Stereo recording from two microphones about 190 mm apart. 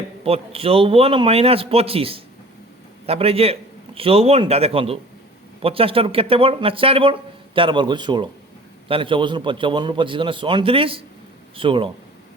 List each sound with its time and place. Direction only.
0.3 s a man's voice: 30° right (ahead or behind)